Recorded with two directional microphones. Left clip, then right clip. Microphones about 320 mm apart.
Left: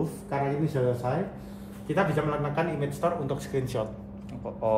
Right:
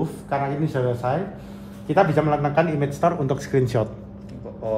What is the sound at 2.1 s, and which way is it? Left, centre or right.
A man's voice, right.